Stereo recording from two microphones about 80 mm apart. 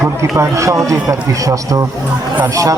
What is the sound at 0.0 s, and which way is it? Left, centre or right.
Speech, right.